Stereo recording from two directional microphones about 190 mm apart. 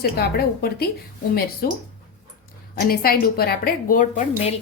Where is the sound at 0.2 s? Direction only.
55° left (ahead or behind).